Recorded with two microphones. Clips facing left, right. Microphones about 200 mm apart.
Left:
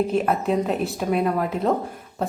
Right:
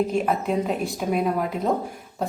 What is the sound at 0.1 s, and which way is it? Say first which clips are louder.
A woman's voice: left 2 dB; centre (ahead or behind).